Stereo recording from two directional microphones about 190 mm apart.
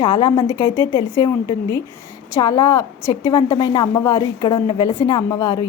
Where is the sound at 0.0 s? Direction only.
20° left (ahead or behind).